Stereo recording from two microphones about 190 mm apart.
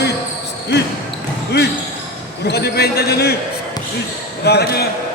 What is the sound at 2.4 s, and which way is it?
Speech, 60° left (ahead or behind).